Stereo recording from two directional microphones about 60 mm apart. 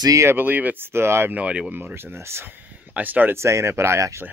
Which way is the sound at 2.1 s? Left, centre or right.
Right.